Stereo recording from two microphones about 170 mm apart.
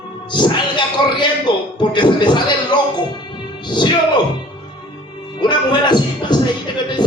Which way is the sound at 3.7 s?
25° left (ahead or behind).